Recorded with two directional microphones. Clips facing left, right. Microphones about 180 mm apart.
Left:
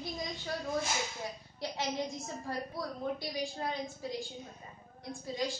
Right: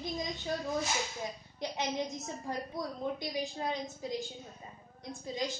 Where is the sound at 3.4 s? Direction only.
20° right (ahead or behind).